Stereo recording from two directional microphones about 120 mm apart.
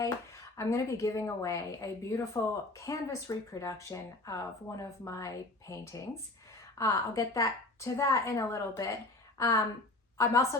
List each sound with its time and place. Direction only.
0.0 s a woman's voice: 25° left (ahead or behind)